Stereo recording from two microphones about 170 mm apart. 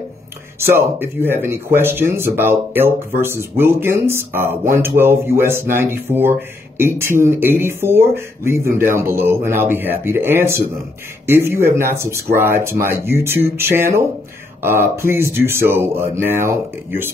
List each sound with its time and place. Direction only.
0.6 s speech: 15° right (ahead or behind)